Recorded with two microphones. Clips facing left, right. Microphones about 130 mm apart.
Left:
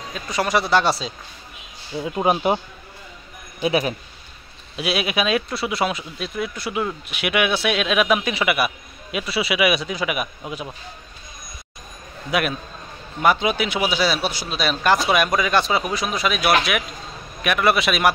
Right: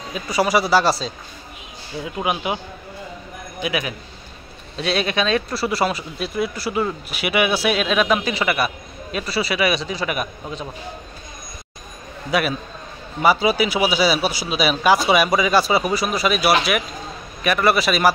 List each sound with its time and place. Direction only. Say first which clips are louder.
0.1 s speech: right 3 dB; 10° right (ahead or behind)
2.2 s a man's voice: left 5 dB; 40° left (ahead or behind)
3.6 s a man's voice: left 4 dB; 35° left (ahead or behind)
4.7 s speech: right 1 dB; 5° left (ahead or behind)
12.3 s a man's voice: right 2 dB; centre (ahead or behind)